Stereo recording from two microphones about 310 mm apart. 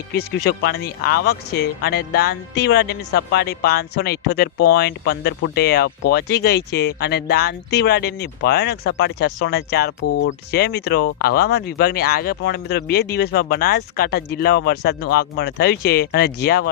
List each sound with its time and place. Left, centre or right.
0.1 s speech: left